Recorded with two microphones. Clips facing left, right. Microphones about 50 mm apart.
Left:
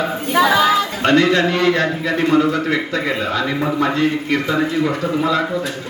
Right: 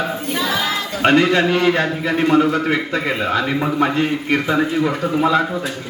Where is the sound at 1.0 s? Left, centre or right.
Centre.